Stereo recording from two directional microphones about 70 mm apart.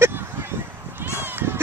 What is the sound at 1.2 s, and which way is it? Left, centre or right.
Run, right.